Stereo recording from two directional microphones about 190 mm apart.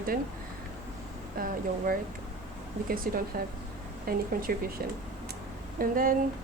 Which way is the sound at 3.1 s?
50° right (ahead or behind).